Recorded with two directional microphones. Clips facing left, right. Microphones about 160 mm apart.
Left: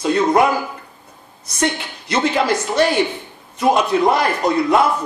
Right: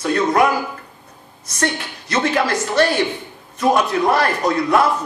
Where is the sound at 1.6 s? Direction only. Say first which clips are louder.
Left 2 dB; 20° left (ahead or behind).